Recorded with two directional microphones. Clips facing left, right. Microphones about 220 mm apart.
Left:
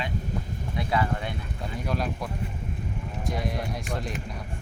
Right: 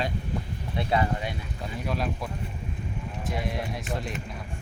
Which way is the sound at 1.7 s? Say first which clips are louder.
Even; centre (ahead or behind).